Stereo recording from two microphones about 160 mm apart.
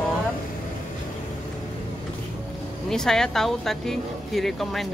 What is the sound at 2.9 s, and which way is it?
Speech, 5° left (ahead or behind).